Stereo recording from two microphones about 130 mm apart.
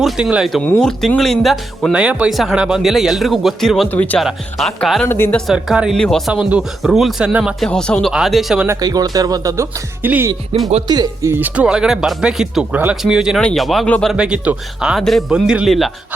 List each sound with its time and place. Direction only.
0.0 s speech: 5° right (ahead or behind)
0.6 s speech: 10° left (ahead or behind)
3.8 s speech: 15° left (ahead or behind)
4.2 s speech: centre (ahead or behind)
5.0 s speech: 15° left (ahead or behind)
5.5 s speech: 5° right (ahead or behind)
8.6 s speech: 25° right (ahead or behind)
10.0 s speech: 15° right (ahead or behind)
10.8 s speech: 30° right (ahead or behind); by 13.8 s centre (ahead or behind)
13.8 s speech: 10° left (ahead or behind)
14.1 s speech: 5° right (ahead or behind)